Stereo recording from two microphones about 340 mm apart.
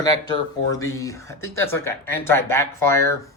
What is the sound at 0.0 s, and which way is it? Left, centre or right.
Speech, centre.